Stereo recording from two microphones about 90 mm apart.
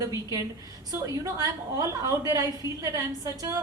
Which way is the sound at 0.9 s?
40° right (ahead or behind).